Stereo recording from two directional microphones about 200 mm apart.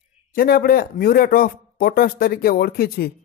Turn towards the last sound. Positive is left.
turn(degrees=50)  # may be behind; listen again after turning